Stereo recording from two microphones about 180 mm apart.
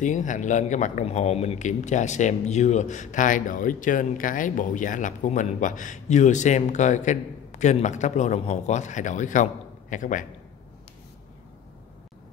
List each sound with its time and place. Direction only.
0.0 s speech: 45° left (ahead or behind)